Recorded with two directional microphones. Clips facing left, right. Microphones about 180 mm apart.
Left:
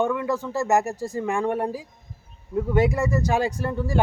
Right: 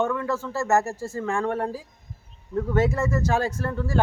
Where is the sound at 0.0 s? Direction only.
15° left (ahead or behind).